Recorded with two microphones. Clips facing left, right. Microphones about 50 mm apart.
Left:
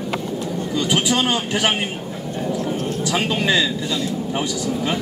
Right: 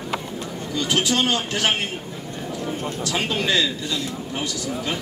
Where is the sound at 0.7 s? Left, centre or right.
Centre.